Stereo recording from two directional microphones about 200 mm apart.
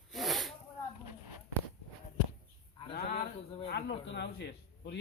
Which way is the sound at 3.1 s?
35° left (ahead or behind).